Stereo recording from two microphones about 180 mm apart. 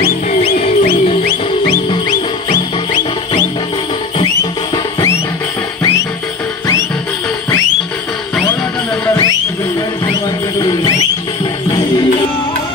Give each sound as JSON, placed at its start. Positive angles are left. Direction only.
{"t": 0.3, "sound": "music", "side_deg": 40}
{"t": 10.6, "sound": "music", "side_deg": 25}